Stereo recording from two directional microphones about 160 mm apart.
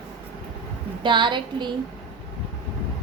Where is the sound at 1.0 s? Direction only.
30° right (ahead or behind).